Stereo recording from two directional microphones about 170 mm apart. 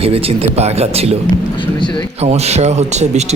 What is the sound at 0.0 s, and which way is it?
A man's voice, 35° right (ahead or behind).